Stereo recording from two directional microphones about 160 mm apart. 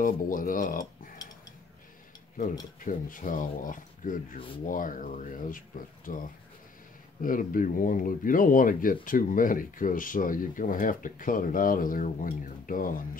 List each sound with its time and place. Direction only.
0.0 s speech: 60° left (ahead or behind)
2.8 s speech: 60° left (ahead or behind)